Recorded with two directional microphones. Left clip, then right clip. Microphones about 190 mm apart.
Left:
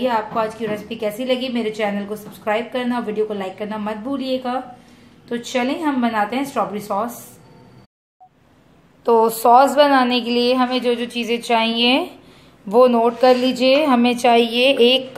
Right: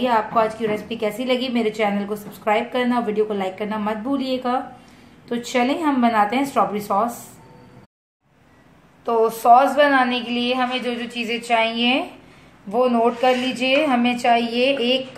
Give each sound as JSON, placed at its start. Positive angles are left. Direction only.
{"t": 0.0, "sound": "a woman's voice", "side_deg": 0}
{"t": 9.0, "sound": "a woman's voice", "side_deg": 45}